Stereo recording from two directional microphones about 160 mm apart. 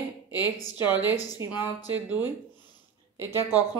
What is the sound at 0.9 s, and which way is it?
Speech, 10° right (ahead or behind).